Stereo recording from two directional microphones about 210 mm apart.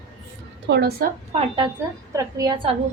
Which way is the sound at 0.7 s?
50° right (ahead or behind).